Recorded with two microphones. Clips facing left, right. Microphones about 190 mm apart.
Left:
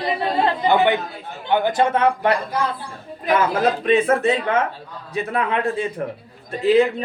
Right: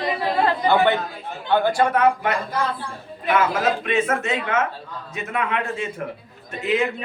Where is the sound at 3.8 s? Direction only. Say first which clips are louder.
Left 5 dB; 35° left (ahead or behind).